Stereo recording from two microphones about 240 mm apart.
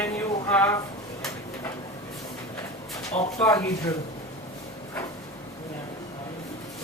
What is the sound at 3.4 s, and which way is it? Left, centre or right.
Speech, centre.